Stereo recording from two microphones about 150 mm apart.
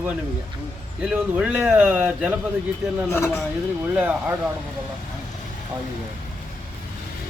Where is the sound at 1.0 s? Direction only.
5° right (ahead or behind).